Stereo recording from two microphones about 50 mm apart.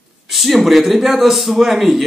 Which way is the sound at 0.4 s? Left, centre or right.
Centre.